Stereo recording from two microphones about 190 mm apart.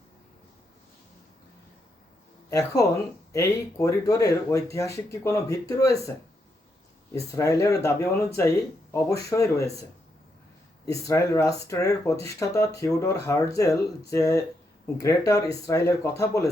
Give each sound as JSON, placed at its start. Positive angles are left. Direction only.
{"t": 2.5, "sound": "speech", "side_deg": 15}
{"t": 10.8, "sound": "speech", "side_deg": 15}